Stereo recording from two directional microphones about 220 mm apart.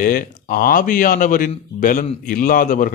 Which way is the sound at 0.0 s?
40° left (ahead or behind).